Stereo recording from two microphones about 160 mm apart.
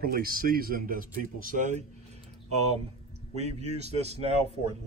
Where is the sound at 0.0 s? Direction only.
65° right (ahead or behind).